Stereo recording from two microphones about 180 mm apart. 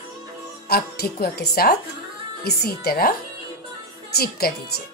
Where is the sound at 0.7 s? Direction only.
60° left (ahead or behind).